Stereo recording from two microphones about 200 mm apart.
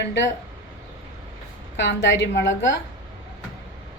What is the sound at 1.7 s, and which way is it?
A woman's voice, 65° left (ahead or behind).